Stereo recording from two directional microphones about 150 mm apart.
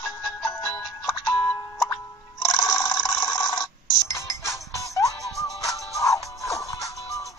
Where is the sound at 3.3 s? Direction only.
25° left (ahead or behind).